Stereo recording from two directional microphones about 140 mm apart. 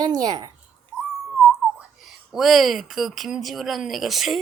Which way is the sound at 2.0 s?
Centre (ahead or behind).